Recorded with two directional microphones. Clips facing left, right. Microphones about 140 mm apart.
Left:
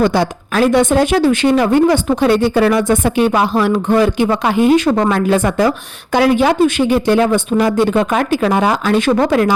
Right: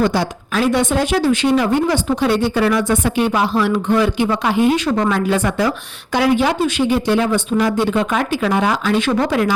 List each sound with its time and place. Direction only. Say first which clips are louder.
0.0 s a woman's voice: left 3 dB; 55° left (ahead or behind)